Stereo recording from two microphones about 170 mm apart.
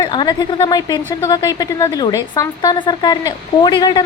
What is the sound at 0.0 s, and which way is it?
A woman's voice, 25° left (ahead or behind).